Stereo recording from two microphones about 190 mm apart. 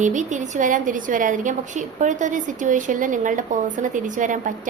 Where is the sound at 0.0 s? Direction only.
40° right (ahead or behind).